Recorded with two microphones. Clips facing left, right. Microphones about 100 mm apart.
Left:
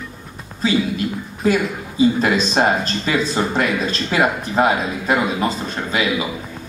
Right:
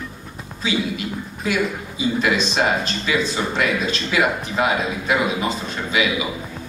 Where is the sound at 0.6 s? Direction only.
40° left (ahead or behind).